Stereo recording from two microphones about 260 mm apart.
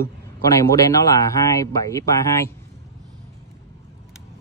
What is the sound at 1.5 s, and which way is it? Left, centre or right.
Speech, centre.